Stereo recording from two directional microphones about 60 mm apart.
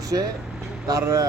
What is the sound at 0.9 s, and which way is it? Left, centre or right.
Speech, right.